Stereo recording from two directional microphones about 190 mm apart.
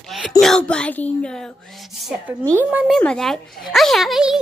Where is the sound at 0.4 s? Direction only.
5° left (ahead or behind).